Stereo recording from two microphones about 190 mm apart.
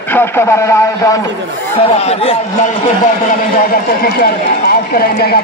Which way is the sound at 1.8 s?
30° left (ahead or behind).